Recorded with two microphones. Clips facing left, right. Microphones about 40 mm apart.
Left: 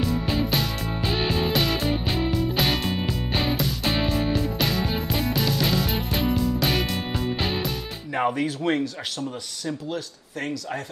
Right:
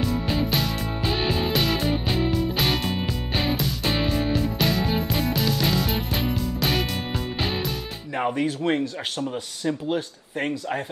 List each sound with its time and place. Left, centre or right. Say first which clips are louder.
0.0 s music: even; centre
9.7 s speech: right 5 dB; right